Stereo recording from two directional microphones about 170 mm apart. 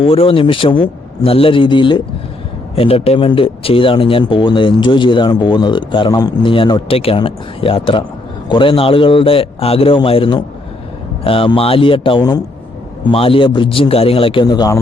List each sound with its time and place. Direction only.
0.0 s a man's voice: 35° left (ahead or behind)